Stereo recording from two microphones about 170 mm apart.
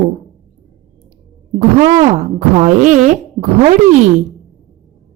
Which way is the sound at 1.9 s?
40° right (ahead or behind).